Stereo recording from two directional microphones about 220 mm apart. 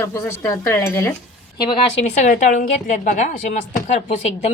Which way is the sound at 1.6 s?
25° left (ahead or behind).